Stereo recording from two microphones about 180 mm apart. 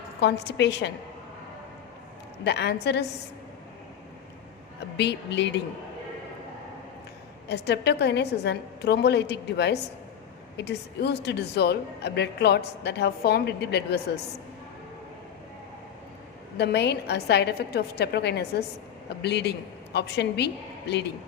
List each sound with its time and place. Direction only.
0.2 s a woman's voice: 70° left (ahead or behind)
2.4 s a woman's voice: 70° left (ahead or behind)
4.9 s a woman's voice: 70° left (ahead or behind)
7.4 s a woman's voice: 65° left (ahead or behind)
16.6 s a woman's voice: 70° left (ahead or behind)